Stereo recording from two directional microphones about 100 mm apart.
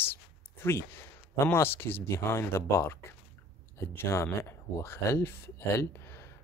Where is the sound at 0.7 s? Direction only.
25° left (ahead or behind).